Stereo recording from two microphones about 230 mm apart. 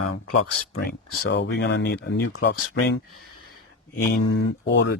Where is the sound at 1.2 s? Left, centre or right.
Left.